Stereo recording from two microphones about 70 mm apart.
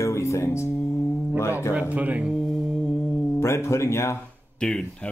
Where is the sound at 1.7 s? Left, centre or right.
Right.